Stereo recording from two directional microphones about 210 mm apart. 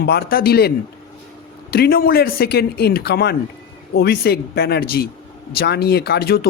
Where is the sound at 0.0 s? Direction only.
50° left (ahead or behind).